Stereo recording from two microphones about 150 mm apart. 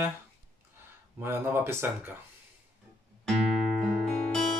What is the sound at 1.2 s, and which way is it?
Speech, 15° right (ahead or behind).